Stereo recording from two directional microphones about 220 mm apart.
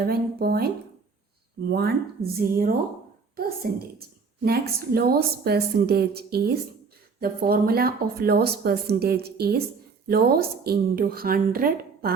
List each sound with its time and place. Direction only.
0.0 s speech: 45° right (ahead or behind)
1.7 s speech: 45° right (ahead or behind)